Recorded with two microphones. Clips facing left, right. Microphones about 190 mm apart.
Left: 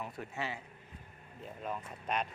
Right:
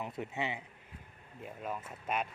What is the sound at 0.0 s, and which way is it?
Speech, 20° right (ahead or behind).